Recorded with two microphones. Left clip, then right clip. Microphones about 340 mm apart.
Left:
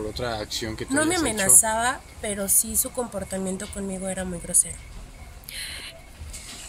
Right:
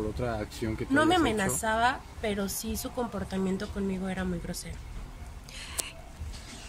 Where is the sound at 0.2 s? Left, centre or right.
Left.